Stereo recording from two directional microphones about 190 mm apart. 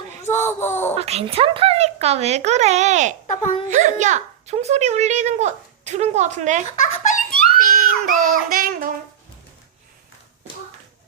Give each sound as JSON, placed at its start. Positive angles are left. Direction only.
{"t": 0.4, "sound": "a sound", "side_deg": 10}
{"t": 0.9, "sound": "a child's voice", "side_deg": -35}
{"t": 3.2, "sound": "a child's voice", "side_deg": 35}
{"t": 3.7, "sound": "a child's voice", "side_deg": -40}
{"t": 6.7, "sound": "giggle", "side_deg": 40}
{"t": 7.6, "sound": "a sound", "side_deg": -45}